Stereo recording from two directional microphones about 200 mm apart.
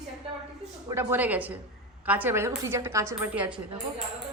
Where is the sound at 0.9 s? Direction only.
10° right (ahead or behind).